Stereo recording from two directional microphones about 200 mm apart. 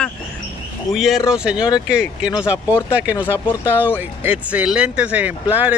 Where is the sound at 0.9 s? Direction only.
Centre (ahead or behind).